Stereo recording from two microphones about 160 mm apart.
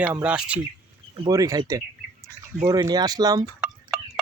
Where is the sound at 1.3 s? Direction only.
20° right (ahead or behind).